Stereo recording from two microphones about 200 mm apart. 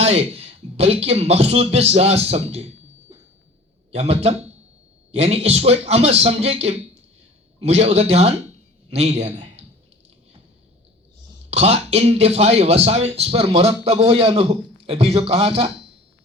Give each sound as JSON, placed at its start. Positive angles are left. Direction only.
{"t": 0.0, "sound": "speech", "side_deg": -30}
{"t": 3.9, "sound": "a man's voice", "side_deg": -30}
{"t": 11.5, "sound": "a man's voice", "side_deg": -30}